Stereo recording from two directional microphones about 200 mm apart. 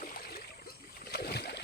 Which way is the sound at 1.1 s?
55° left (ahead or behind).